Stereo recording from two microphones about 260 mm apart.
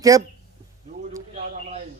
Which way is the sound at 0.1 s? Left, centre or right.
Centre.